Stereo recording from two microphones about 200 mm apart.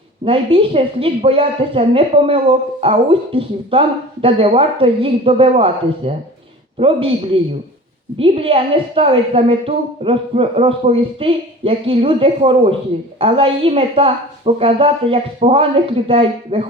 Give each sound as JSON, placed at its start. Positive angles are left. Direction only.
{"t": 0.3, "sound": "a woman's voice", "side_deg": -25}